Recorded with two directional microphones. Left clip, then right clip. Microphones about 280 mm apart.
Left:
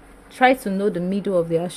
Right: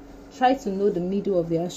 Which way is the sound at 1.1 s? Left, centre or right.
Centre.